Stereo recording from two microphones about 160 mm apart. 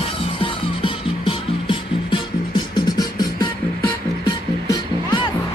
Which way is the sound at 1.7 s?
30° left (ahead or behind).